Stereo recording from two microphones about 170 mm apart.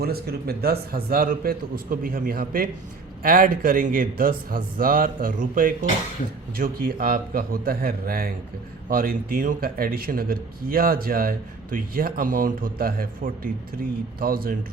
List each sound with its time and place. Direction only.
0.0 s speech: 65° right (ahead or behind)